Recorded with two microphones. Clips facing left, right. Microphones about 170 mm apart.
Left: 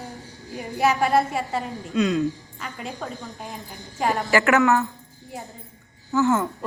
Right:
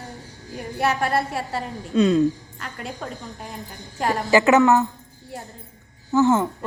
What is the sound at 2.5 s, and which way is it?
A woman's voice, centre (ahead or behind).